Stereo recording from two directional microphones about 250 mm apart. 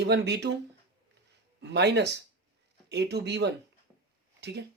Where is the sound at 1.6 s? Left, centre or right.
Right.